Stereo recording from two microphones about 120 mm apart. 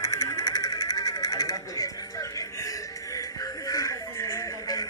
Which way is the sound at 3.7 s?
30° left (ahead or behind).